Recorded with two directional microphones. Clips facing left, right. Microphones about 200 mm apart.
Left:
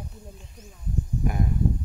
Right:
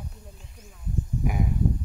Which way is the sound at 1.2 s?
5° right (ahead or behind).